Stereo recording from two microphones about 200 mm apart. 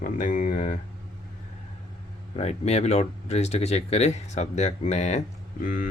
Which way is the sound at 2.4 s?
30° left (ahead or behind).